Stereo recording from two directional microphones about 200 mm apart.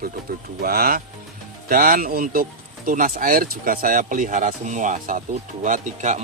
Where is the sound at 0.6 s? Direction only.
50° right (ahead or behind).